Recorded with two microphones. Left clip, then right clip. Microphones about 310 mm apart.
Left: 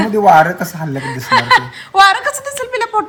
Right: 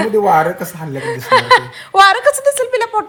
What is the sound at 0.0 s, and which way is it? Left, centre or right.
Speech, centre.